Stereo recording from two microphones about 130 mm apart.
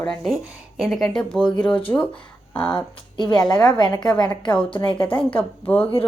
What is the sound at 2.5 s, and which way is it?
Speech, 15° left (ahead or behind).